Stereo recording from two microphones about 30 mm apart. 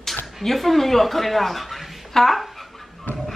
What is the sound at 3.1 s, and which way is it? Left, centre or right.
Music, left.